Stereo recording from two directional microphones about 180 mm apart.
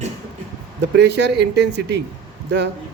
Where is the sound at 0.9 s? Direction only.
70° right (ahead or behind).